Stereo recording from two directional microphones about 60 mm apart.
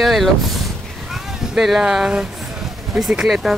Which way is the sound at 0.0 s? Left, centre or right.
Centre.